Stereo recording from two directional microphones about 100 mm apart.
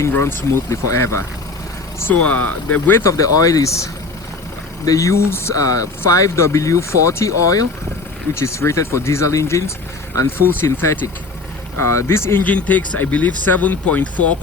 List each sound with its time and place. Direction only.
0.0 s speech: 25° left (ahead or behind)
2.1 s speech: 15° left (ahead or behind)
3.0 s speech: 35° left (ahead or behind)
4.9 s speech: 30° left (ahead or behind); by 14.3 s 15° left (ahead or behind)